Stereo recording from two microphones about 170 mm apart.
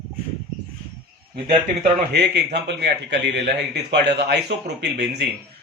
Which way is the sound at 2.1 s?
80° right.